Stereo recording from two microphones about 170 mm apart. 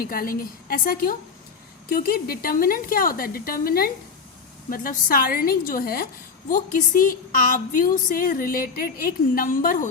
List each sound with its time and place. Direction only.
0.0 s a woman's voice: 55° left (ahead or behind)
6.5 s a woman's voice: 50° left (ahead or behind)